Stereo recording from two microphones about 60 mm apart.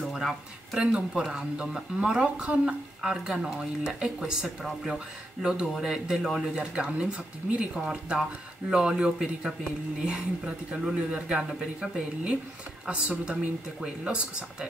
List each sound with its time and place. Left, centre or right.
0.0 s speech: centre
8.8 s speech: centre